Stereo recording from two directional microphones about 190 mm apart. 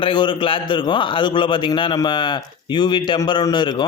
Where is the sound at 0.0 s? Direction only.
25° left (ahead or behind).